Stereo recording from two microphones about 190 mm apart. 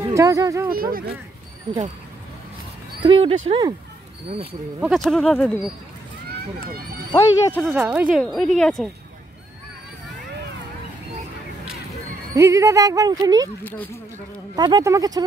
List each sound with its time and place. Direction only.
0.1 s speech: 15° right (ahead or behind)
0.7 s speech: 50° right (ahead or behind)
3.0 s speech: 30° right (ahead or behind)
4.7 s speech: centre (ahead or behind)
7.1 s speech: 15° left (ahead or behind)
7.7 s speech: 10° right (ahead or behind)
12.4 s speech: 15° right (ahead or behind)
14.5 s speech: 20° right (ahead or behind)